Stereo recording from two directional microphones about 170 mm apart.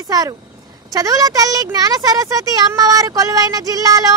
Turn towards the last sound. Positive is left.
turn(degrees=-20)  # may be behind; listen again after turning